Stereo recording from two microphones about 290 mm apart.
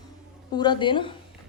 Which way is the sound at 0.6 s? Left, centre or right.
Centre.